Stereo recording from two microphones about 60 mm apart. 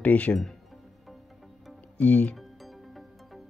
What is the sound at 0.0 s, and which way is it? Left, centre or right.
Speech, left.